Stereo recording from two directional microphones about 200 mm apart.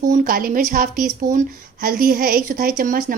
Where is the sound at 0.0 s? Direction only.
45° right (ahead or behind).